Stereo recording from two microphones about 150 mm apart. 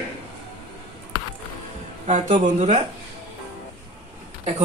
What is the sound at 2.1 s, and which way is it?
Speech, 55° right (ahead or behind).